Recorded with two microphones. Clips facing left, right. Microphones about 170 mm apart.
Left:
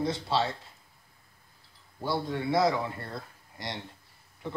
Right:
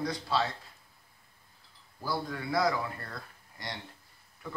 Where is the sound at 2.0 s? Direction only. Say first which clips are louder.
Left 4 dB; 25° left (ahead or behind).